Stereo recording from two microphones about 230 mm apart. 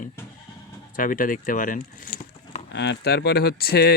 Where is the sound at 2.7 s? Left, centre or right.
Left.